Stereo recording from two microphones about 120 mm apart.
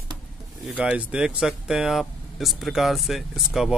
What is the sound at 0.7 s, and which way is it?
Speech, 10° right (ahead or behind).